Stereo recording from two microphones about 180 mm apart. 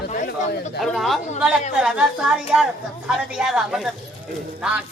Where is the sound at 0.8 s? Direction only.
Centre (ahead or behind).